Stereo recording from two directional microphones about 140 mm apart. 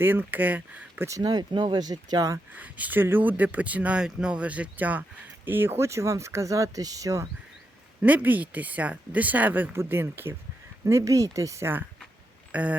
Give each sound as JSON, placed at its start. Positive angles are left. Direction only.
{"t": 0.0, "sound": "speech", "side_deg": -15}
{"t": 1.2, "sound": "speech", "side_deg": -30}
{"t": 2.6, "sound": "speech", "side_deg": -10}
{"t": 8.0, "sound": "speech", "side_deg": -10}
{"t": 12.5, "sound": "a sound", "side_deg": -10}